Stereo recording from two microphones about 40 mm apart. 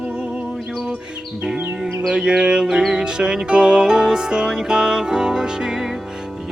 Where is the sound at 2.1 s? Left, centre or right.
Right.